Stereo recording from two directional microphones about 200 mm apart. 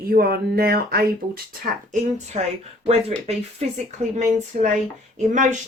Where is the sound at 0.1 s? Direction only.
50° right (ahead or behind).